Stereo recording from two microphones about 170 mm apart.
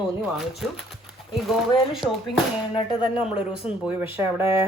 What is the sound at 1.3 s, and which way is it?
Speech, centre (ahead or behind).